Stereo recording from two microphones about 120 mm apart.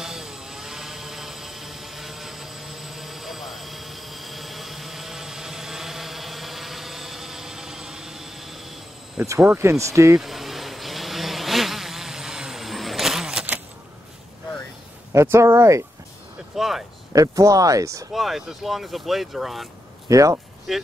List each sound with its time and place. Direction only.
0.0 s vehicle: 5° right (ahead or behind)
9.6 s speech: 25° right (ahead or behind)
10.2 s insect: centre (ahead or behind)
15.1 s speech: 20° right (ahead or behind)
16.5 s speech: centre (ahead or behind)
17.1 s speech: 30° right (ahead or behind)
18.1 s speech: centre (ahead or behind)
20.1 s speech: 25° right (ahead or behind)
20.7 s speech: centre (ahead or behind)